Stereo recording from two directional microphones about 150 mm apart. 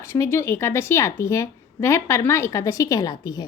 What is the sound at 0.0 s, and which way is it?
A woman's voice, 20° left (ahead or behind).